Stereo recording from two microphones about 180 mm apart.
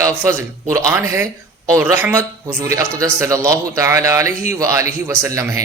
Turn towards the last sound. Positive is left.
turn(degrees=-15)  # may be behind; listen again after turning